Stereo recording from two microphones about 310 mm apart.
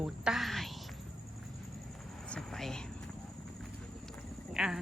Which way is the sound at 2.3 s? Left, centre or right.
Centre.